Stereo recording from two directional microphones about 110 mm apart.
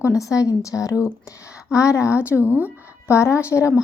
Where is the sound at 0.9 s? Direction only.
10° right (ahead or behind).